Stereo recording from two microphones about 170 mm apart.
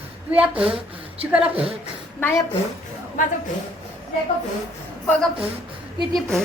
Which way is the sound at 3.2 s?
50° left (ahead or behind).